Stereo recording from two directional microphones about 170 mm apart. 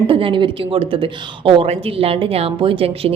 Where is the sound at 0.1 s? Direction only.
30° right (ahead or behind).